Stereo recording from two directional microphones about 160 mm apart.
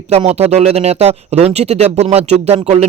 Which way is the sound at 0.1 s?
40° right (ahead or behind).